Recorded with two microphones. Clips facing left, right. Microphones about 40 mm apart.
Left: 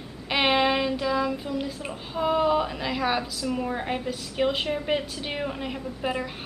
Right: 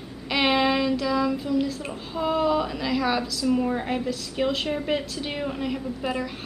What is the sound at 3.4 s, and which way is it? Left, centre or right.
A woman's voice, centre.